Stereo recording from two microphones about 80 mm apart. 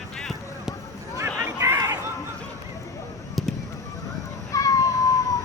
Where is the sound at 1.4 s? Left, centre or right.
Right.